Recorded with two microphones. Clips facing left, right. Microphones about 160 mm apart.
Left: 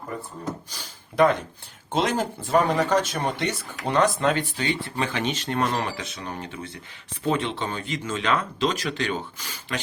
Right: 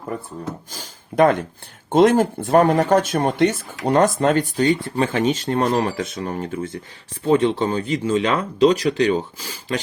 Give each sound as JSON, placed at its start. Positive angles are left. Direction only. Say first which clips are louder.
{"t": 0.7, "sound": "speech", "louder": "right 6 dB", "side_deg": -45}